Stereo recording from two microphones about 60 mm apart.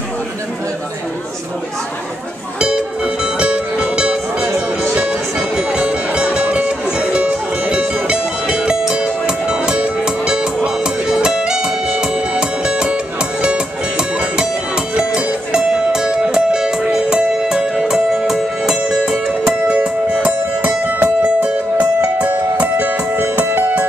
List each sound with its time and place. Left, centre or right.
3.3 s music: centre
5.6 s music: centre; by 23.6 s right